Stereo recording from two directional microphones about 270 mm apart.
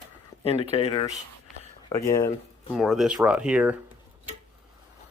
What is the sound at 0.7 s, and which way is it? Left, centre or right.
Speech, centre.